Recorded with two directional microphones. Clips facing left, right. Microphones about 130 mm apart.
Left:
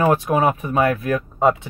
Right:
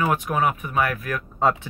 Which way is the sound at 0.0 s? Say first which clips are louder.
Left 5 dB; 30° left (ahead or behind).